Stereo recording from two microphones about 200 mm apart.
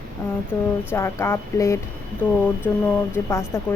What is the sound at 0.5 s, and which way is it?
Speech, 10° left (ahead or behind).